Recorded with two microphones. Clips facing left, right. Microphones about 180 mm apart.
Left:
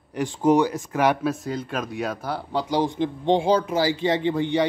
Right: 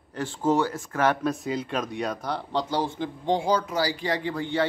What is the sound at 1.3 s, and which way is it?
Speech, centre (ahead or behind).